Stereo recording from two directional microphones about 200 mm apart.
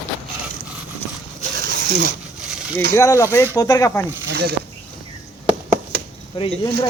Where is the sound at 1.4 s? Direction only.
50° right (ahead or behind).